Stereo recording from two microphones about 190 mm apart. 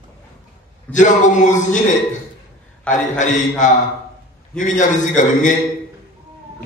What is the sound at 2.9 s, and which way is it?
A man's voice, 40° left (ahead or behind).